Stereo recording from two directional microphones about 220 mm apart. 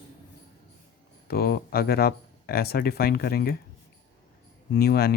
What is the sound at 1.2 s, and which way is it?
Speech, 45° left (ahead or behind).